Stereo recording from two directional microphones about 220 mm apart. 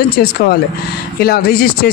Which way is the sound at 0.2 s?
45° left (ahead or behind).